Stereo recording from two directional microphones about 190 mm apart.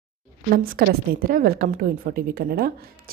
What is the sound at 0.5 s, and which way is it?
A woman's voice, 50° right (ahead or behind).